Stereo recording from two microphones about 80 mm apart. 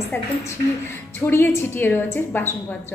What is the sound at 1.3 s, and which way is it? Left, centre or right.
A woman's voice, left.